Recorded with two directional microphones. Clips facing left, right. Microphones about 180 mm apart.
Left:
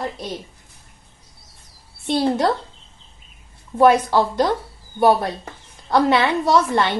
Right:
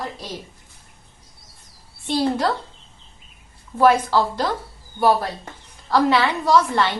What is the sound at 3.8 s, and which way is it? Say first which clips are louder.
A woman's voice: left 2 dB; 20° left (ahead or behind).